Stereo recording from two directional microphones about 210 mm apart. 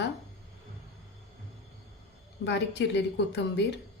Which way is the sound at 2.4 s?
55° left (ahead or behind).